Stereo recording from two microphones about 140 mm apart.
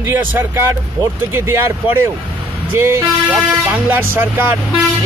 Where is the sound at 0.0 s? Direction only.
15° right (ahead or behind).